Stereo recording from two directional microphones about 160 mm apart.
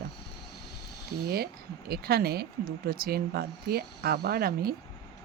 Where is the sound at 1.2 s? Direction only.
75° right (ahead or behind).